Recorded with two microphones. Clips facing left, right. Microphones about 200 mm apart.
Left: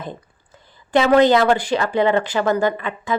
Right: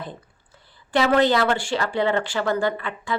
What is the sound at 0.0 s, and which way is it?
Speech, 20° left (ahead or behind).